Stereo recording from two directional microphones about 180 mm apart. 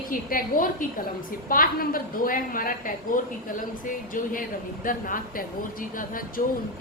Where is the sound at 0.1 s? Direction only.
50° left (ahead or behind).